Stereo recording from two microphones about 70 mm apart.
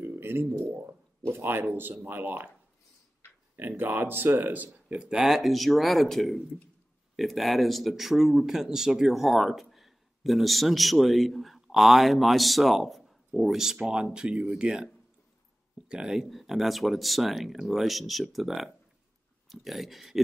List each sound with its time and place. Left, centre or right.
0.0 s a sound: right
0.8 s speech: right
3.5 s speech: right
4.8 s speech: centre
15.9 s speech: centre